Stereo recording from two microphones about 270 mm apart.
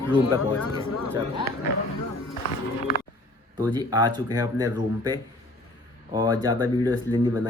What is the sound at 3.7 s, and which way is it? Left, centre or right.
Speech, centre.